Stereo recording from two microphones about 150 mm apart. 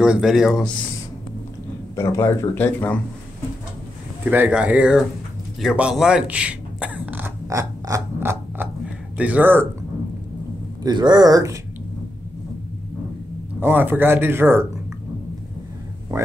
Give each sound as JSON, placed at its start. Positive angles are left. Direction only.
{"t": 0.0, "sound": "speech", "side_deg": -5}
{"t": 2.0, "sound": "speech", "side_deg": 15}
{"t": 4.2, "sound": "speech", "side_deg": -10}
{"t": 5.6, "sound": "a sound", "side_deg": -5}
{"t": 10.8, "sound": "speech", "side_deg": -30}
{"t": 13.6, "sound": "speech", "side_deg": -10}